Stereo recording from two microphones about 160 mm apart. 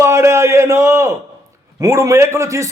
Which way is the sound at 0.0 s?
15° right (ahead or behind).